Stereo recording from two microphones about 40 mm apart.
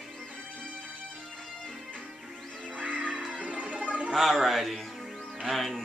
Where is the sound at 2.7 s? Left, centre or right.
Right.